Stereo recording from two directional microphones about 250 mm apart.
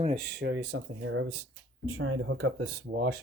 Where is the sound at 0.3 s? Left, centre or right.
Right.